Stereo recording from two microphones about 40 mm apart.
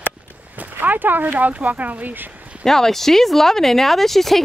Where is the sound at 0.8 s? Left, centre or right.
Right.